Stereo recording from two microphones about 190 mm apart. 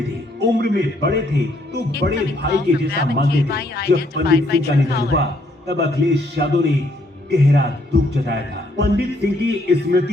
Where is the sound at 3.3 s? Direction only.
60° left (ahead or behind).